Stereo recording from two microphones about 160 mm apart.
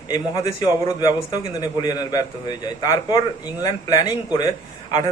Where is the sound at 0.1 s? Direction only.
20° left (ahead or behind).